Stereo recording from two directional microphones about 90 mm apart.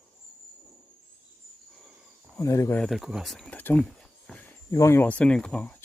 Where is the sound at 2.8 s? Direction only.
5° right (ahead or behind).